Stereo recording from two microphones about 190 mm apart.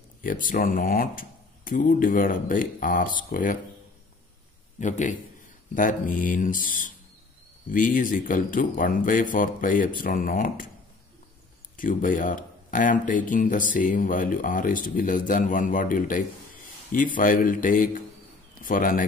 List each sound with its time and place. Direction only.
0.2 s speech: 45° left (ahead or behind)
4.7 s a man's voice: 40° left (ahead or behind)
11.7 s speech: 45° left (ahead or behind)